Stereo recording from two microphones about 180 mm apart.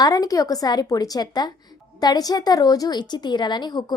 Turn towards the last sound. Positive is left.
turn(degrees=25)  # may be behind; listen again after turning